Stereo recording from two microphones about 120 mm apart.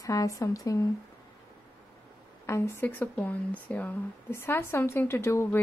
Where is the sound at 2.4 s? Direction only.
20° left (ahead or behind).